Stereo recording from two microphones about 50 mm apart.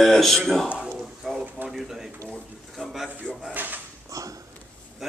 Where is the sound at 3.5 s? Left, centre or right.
Right.